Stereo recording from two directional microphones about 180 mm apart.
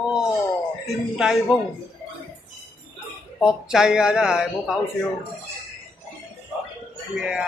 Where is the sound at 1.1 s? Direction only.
Centre (ahead or behind).